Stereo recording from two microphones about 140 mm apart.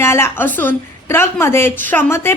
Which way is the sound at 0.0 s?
20° left (ahead or behind).